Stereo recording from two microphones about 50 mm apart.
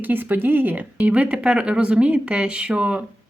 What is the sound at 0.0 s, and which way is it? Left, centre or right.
A woman's voice, right.